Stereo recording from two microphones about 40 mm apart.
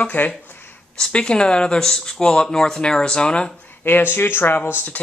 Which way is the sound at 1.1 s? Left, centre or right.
Left.